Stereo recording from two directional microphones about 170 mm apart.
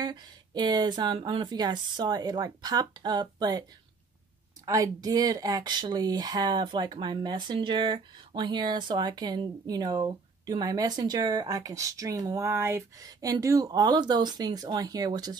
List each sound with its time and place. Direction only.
0.0 s speech: 25° right (ahead or behind)
4.6 s speech: 20° right (ahead or behind)